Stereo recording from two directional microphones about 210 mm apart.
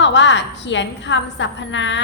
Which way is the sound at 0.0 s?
60° left (ahead or behind).